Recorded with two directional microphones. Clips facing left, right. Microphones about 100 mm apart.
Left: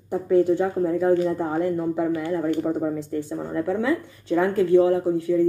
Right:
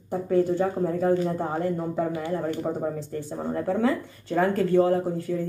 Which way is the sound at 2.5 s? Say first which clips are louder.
Left 4 dB; 35° right (ahead or behind).